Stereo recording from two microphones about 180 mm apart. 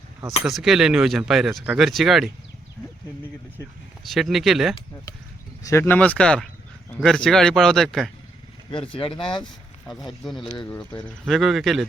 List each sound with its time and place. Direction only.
0.4 s speech: centre (ahead or behind)
4.0 s speech: centre (ahead or behind)
5.6 s speech: 15° left (ahead or behind)
8.7 s speech: 30° left (ahead or behind)
10.2 s speech: centre (ahead or behind)